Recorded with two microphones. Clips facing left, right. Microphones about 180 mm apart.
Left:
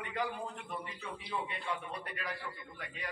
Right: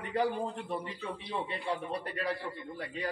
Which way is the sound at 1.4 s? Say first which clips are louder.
Right 4 dB; 35° right (ahead or behind).